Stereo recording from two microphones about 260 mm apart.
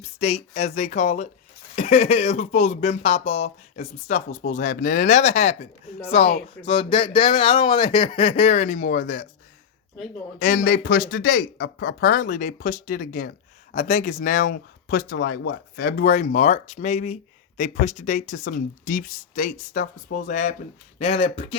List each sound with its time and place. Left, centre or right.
0.0 s speech: left
10.4 s speech: left